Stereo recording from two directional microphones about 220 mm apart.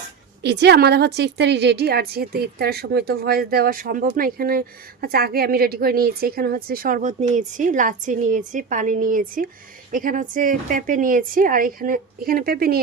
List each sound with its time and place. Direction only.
0.4 s a woman's voice: 50° right (ahead or behind)